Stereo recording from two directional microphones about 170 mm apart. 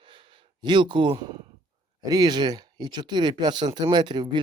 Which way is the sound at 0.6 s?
25° right (ahead or behind).